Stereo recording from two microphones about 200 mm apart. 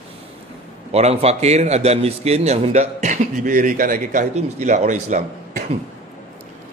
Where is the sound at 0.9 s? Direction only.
30° right (ahead or behind).